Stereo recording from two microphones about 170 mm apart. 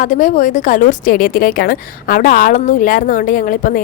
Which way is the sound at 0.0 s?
50° left (ahead or behind).